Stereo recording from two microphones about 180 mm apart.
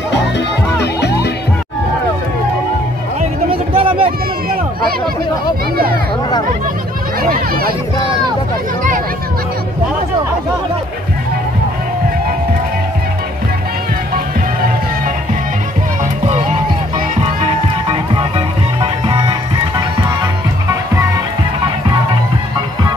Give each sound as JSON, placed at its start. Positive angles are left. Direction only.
{"t": 1.0, "sound": "music", "side_deg": 65}
{"t": 3.2, "sound": "a sound", "side_deg": -30}
{"t": 7.2, "sound": "speech", "side_deg": -55}
{"t": 16.3, "sound": "music", "side_deg": -40}